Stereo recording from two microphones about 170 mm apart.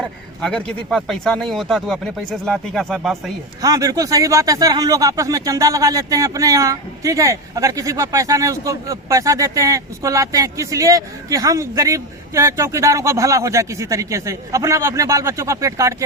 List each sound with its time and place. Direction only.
0.0 s speech: 5° left (ahead or behind)
3.6 s speech: 20° right (ahead or behind)